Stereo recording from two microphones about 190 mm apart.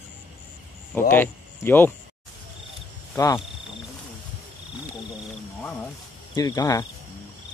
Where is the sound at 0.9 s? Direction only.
10° left (ahead or behind).